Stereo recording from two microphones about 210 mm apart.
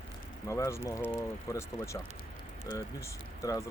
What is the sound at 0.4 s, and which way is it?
Speech, 15° left (ahead or behind).